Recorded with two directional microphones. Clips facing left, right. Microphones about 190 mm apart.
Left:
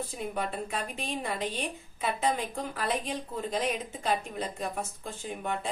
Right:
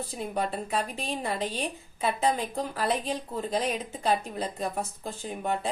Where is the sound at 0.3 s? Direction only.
35° right (ahead or behind).